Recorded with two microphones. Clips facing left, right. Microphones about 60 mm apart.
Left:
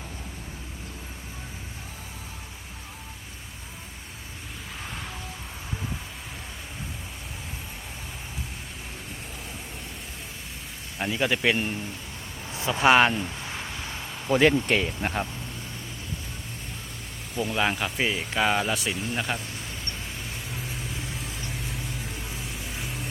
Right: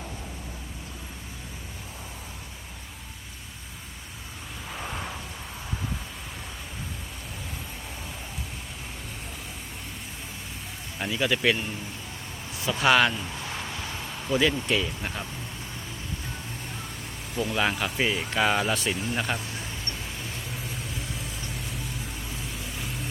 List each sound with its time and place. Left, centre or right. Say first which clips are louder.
4.8 s a sound: right 4 dB; centre
11.1 s speech: even; left
11.5 s speech: left 4 dB; left
12.5 s speech: left 2 dB; left
13.2 s a sound: even; centre
14.3 s speech: left 4 dB; left
17.5 s speech: left 1 dB; centre